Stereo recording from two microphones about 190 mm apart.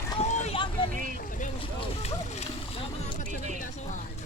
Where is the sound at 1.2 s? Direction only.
40° left (ahead or behind).